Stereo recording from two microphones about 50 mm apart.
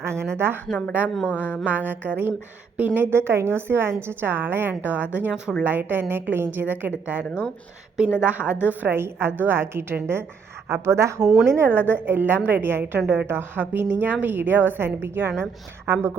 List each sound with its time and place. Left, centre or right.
0.0 s a sound: right
0.3 s a woman's voice: right
1.0 s a woman's voice: right
1.3 s mantra: left
1.6 s a woman's voice: right
3.1 s a woman's voice: right
5.6 s a woman's voice: right
7.9 s a woman's voice: right
10.8 s speech: right
11.4 s a woman's voice: right